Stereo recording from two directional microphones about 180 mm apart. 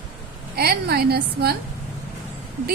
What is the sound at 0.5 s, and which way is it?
A woman's voice, 60° right (ahead or behind).